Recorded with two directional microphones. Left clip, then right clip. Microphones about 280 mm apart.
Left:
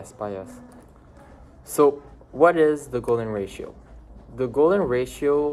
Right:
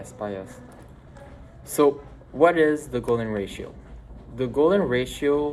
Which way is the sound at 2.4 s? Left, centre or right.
Centre.